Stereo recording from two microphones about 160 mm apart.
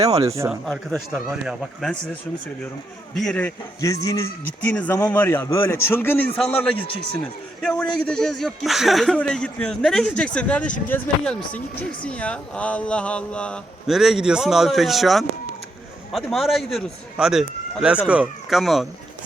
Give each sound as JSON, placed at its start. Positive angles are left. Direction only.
{"t": 0.3, "sound": "speech", "side_deg": -20}
{"t": 0.6, "sound": "speech", "side_deg": 5}
{"t": 3.2, "sound": "speech", "side_deg": 5}
{"t": 3.8, "sound": "a man's voice", "side_deg": 20}
{"t": 4.6, "sound": "a man's voice", "side_deg": 10}
{"t": 7.6, "sound": "speech", "side_deg": 5}